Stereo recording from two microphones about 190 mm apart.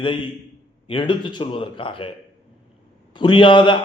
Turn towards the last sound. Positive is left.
turn(degrees=25)  # may be behind; listen again after turning